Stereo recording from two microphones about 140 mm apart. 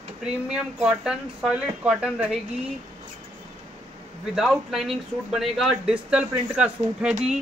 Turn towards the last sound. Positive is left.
turn(degrees=-5)  # may be behind; listen again after turning